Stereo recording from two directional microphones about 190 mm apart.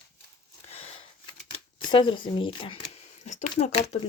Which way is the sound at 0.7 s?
35° left (ahead or behind).